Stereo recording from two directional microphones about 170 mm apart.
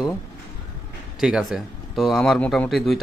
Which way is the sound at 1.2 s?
5° right (ahead or behind).